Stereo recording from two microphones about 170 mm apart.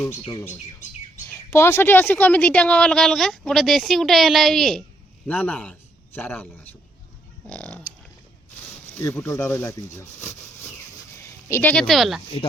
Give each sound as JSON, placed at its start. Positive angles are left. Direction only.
{"t": 1.3, "sound": "a woman's voice", "side_deg": 15}
{"t": 9.0, "sound": "speech", "side_deg": 15}